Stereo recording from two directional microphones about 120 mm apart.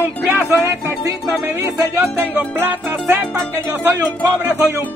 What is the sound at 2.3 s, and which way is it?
Music, 15° right (ahead or behind).